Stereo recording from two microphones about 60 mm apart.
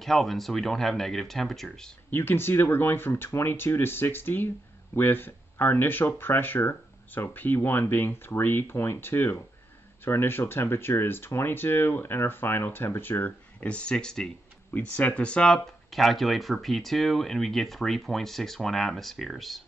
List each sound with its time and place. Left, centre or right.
0.0 s speech: centre
2.0 s speech: left
13.7 s speech: centre
15.9 s speech: centre